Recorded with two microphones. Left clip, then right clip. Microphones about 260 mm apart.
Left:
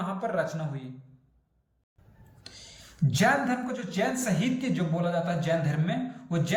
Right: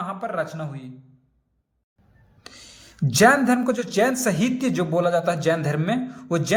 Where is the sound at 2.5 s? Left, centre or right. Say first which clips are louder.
Right 3 dB; centre.